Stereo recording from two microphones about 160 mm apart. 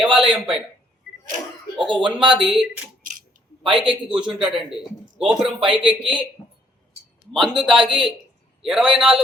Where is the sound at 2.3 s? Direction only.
5° right (ahead or behind).